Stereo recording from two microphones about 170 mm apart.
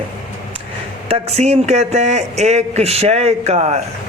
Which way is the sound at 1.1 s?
40° right (ahead or behind).